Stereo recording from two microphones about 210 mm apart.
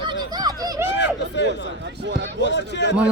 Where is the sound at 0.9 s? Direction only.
55° left (ahead or behind).